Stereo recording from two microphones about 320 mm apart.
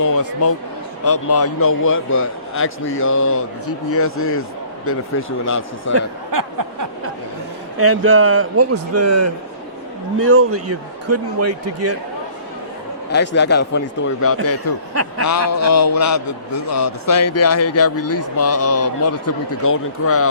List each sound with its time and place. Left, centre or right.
1.0 s a man's voice: left
6.3 s a sound: right
7.8 s speech: right
10.2 s speech: right
13.1 s a man's voice: left
15.2 s a man's voice: left